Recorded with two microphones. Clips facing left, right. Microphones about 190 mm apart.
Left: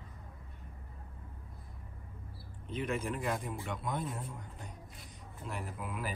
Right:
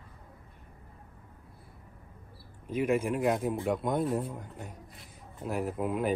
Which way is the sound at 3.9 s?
Centre (ahead or behind).